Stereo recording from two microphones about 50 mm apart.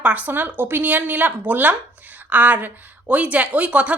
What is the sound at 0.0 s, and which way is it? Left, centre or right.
A woman's voice, right.